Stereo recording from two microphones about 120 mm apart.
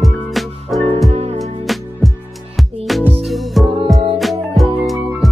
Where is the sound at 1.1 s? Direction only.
60° right (ahead or behind).